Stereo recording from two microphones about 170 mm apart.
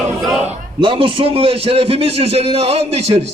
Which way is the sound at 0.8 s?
30° right (ahead or behind).